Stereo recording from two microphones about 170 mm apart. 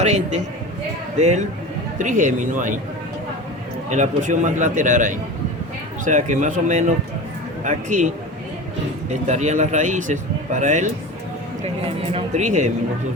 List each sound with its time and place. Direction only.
0.0 s a man's voice: 40° right (ahead or behind)
3.8 s speech: 45° right (ahead or behind)